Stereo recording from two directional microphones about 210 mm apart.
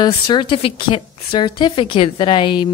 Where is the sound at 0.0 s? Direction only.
20° left (ahead or behind).